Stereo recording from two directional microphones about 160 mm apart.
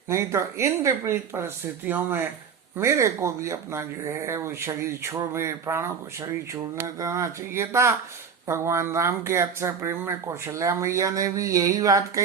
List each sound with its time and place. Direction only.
0.1 s speech: 20° right (ahead or behind)